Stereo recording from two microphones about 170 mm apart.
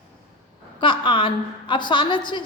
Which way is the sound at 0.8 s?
30° left (ahead or behind).